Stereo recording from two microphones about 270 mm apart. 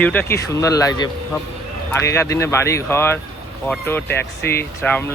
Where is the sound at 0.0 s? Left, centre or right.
Centre.